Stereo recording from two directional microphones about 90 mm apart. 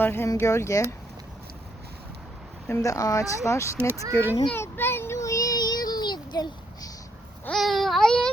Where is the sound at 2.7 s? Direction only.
40° left (ahead or behind).